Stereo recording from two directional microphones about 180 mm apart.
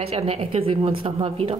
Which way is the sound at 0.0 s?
35° right (ahead or behind).